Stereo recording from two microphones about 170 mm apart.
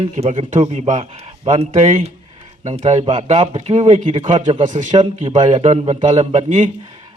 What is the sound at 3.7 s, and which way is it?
A man's voice, 45° right (ahead or behind).